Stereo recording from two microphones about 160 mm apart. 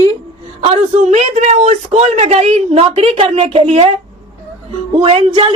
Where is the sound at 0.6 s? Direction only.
40° right (ahead or behind).